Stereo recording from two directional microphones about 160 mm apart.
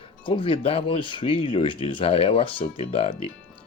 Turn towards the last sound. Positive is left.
turn(degrees=40)  # may be behind; listen again after turning